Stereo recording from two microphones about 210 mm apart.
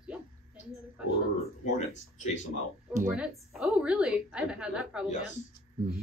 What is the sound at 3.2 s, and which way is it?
A woman's voice, 5° right (ahead or behind).